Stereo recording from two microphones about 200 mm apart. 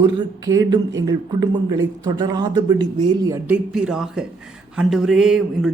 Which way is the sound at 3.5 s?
5° right (ahead or behind).